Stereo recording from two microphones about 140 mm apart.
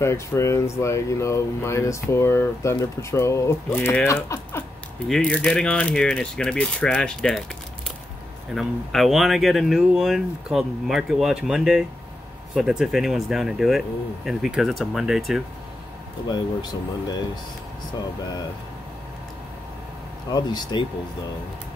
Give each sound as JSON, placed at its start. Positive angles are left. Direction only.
{"t": 0.0, "sound": "speech", "side_deg": 20}
{"t": 5.0, "sound": "speech", "side_deg": 5}
{"t": 8.5, "sound": "speech", "side_deg": 0}
{"t": 20.2, "sound": "speech", "side_deg": 30}